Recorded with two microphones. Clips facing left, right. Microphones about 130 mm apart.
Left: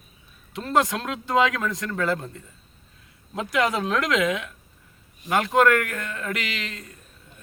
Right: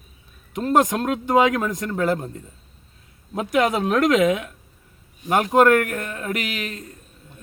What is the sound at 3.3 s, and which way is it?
A man's voice, 45° right (ahead or behind).